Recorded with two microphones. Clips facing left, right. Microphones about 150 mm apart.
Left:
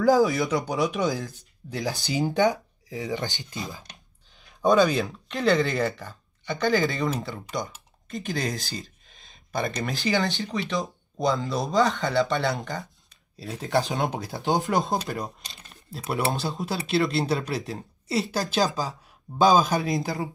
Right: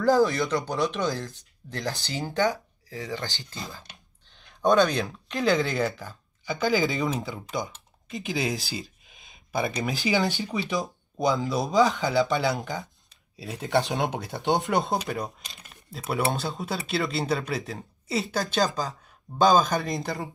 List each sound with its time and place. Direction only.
0.0 s speech: centre (ahead or behind); by 3.8 s 20° left (ahead or behind)
4.3 s speech: 5° left (ahead or behind)